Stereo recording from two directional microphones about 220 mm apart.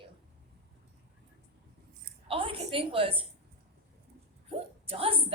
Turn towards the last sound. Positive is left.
turn(degrees=-25)  # may be behind; listen again after turning